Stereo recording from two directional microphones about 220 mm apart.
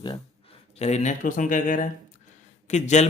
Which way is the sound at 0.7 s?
30° left (ahead or behind).